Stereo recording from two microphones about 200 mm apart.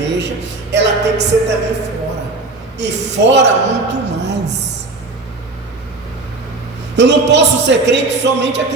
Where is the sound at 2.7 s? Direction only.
60° right (ahead or behind).